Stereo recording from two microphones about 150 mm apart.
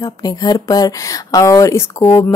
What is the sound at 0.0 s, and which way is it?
Speech, 25° left (ahead or behind).